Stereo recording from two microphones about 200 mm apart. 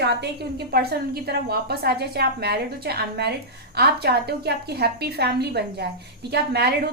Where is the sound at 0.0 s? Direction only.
55° right (ahead or behind).